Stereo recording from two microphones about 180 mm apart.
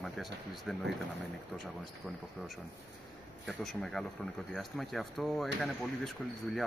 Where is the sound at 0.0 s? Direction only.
Centre (ahead or behind).